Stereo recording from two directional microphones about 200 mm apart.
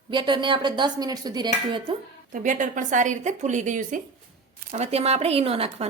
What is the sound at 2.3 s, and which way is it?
A woman's voice, 40° right (ahead or behind).